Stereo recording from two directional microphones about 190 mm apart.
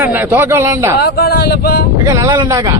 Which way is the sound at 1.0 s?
55° left (ahead or behind).